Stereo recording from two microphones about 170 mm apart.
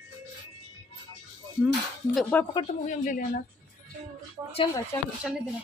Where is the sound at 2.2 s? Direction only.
5° left (ahead or behind).